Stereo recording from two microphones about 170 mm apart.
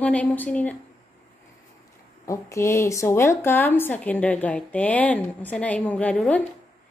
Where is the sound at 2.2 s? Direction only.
20° left (ahead or behind).